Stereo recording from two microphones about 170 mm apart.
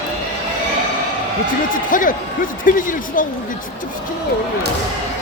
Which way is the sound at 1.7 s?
50° left (ahead or behind).